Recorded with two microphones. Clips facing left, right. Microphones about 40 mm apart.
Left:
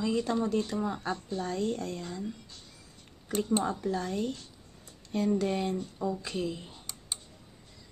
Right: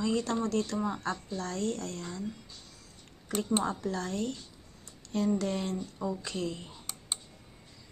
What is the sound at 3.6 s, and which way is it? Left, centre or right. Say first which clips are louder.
Speech: left 2 dB; centre.